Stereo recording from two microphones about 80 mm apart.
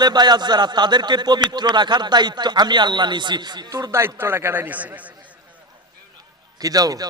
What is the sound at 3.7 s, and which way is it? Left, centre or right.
A man's voice, right.